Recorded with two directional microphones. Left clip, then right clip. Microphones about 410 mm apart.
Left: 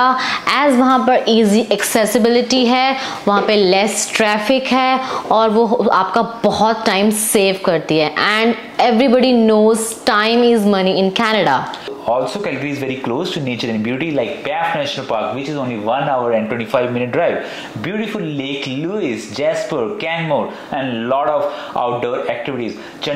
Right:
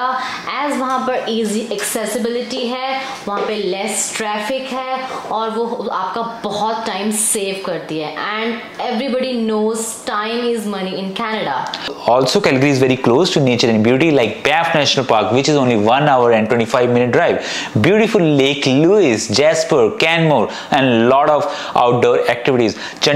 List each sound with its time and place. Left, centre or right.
0.0 s a woman's voice: left
12.1 s speech: right
17.8 s speech: right